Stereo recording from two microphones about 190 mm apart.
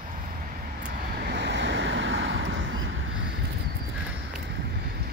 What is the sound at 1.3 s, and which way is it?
Vehicle, 65° right (ahead or behind).